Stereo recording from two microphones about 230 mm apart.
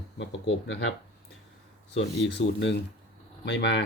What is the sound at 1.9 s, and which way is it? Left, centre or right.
Speech, left.